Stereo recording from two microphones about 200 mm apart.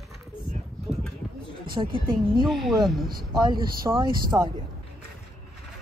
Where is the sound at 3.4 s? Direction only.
20° right (ahead or behind).